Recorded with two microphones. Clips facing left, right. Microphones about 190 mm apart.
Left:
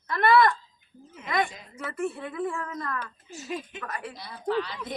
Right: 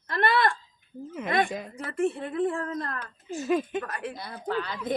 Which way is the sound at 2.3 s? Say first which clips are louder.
Right 4 dB; 30° right (ahead or behind).